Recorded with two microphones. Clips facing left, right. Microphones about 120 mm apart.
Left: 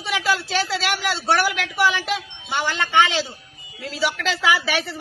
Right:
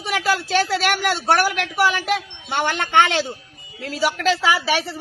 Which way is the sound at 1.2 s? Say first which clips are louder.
Right 1 dB; 50° right (ahead or behind).